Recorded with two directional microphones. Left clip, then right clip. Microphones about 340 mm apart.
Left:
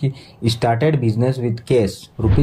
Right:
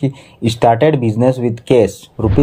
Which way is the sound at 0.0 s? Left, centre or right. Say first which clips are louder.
Right 5 dB; centre.